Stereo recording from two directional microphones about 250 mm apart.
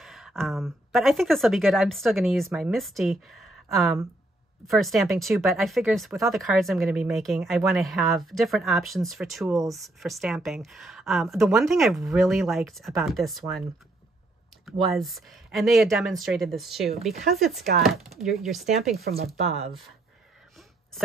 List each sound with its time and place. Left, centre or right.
0.0 s speech: centre
9.5 s speech: centre
9.8 s speech: centre
14.9 s speech: centre
18.9 s speech: right